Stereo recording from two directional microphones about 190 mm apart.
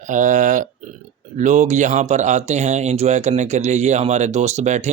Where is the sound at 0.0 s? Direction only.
40° right (ahead or behind).